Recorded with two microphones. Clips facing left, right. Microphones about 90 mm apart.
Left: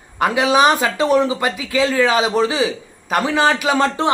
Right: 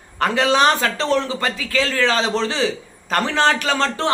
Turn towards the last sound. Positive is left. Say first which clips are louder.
# left 3 dB
turn(degrees=15)  # may be behind; listen again after turning